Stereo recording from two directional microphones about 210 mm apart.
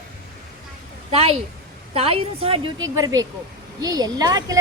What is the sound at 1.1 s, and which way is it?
A woman's voice, 30° right (ahead or behind).